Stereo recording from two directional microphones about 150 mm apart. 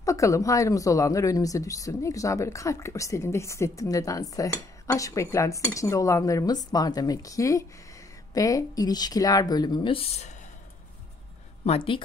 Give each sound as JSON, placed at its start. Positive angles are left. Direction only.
{"t": 0.0, "sound": "speech", "side_deg": 20}
{"t": 11.6, "sound": "a woman's voice", "side_deg": 40}